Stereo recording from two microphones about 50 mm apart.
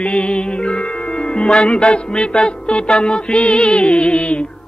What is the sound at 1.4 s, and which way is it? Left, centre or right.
Music, centre.